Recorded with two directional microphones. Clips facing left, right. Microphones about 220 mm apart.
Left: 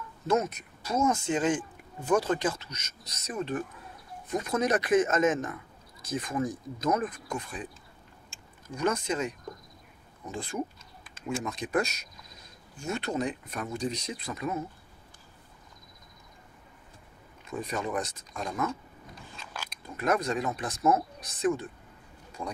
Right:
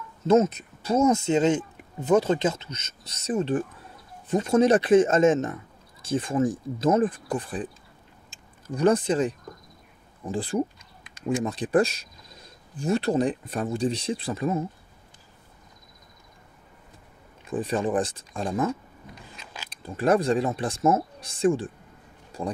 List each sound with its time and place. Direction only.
0.3 s speech: 25° right (ahead or behind)
8.7 s speech: 35° right (ahead or behind)
10.3 s speech: 35° right (ahead or behind)
17.5 s speech: 30° right (ahead or behind)
19.7 s speech: 30° right (ahead or behind)